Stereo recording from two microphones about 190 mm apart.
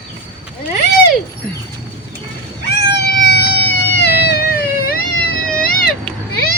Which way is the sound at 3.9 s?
60° left (ahead or behind).